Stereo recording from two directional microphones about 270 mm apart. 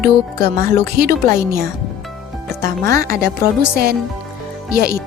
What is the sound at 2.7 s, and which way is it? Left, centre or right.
A woman's voice, right.